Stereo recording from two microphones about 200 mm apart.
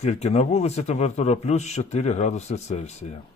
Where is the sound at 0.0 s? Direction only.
30° left (ahead or behind).